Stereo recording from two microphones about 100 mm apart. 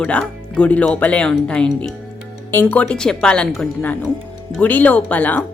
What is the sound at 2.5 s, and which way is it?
Speech, 20° left (ahead or behind).